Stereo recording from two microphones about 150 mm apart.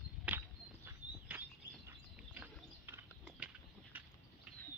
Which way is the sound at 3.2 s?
5° right (ahead or behind).